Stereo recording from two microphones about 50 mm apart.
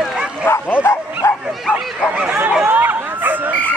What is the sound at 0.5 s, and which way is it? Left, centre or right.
Bow-wow, left.